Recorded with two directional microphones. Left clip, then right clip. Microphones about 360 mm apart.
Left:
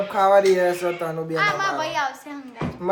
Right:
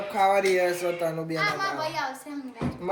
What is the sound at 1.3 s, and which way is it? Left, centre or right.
Speech, centre.